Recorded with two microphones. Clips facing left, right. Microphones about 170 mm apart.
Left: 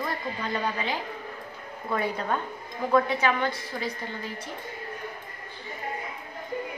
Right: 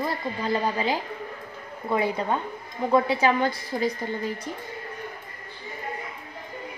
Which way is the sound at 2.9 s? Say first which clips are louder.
Right 2 dB; 30° right (ahead or behind).